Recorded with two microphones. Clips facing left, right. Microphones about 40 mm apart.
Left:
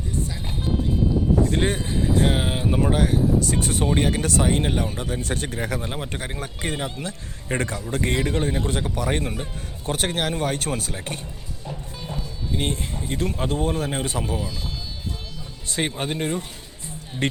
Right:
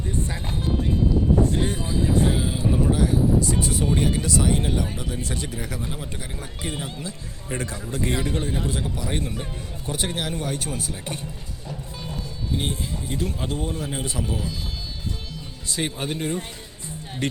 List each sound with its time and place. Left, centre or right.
1.5 s a man's voice: left
10.9 s a man's voice: left
12.5 s a man's voice: left
15.7 s speech: left